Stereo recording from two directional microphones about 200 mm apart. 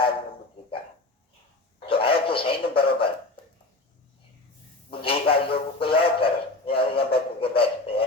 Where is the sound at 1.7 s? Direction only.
25° left (ahead or behind).